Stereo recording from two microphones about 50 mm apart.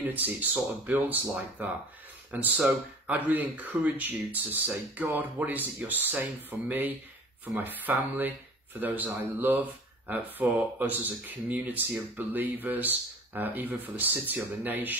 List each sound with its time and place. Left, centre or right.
0.0 s speech: right
2.3 s speech: right